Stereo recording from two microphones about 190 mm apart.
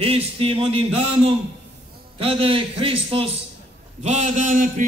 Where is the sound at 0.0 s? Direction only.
30° right (ahead or behind).